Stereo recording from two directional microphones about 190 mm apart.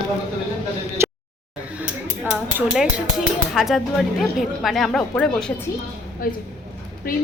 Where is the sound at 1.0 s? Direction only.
15° right (ahead or behind).